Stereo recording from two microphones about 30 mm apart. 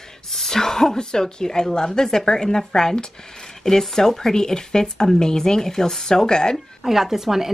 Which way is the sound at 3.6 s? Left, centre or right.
Centre.